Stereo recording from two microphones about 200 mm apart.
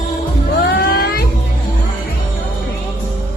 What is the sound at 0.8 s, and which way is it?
Music, 50° left (ahead or behind).